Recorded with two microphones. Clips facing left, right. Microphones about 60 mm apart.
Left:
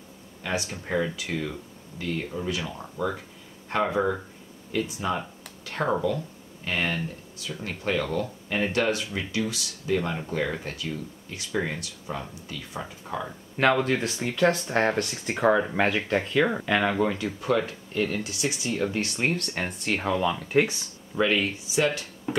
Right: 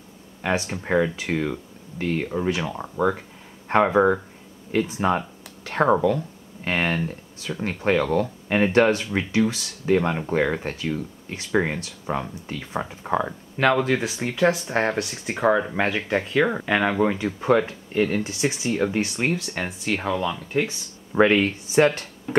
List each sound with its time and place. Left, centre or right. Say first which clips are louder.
0.4 s speech: right 5 dB; right
13.6 s speech: right 2 dB; centre
19.2 s speech: right 2 dB; centre
21.1 s speech: right 6 dB; right